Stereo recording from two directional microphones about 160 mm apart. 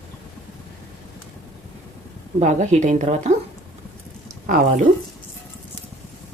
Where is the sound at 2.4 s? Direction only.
45° right (ahead or behind).